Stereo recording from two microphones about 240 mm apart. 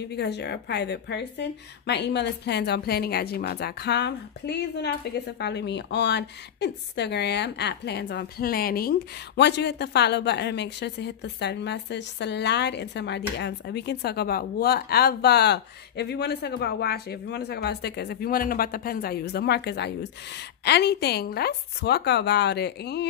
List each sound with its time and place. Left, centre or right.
0.1 s a woman's voice: left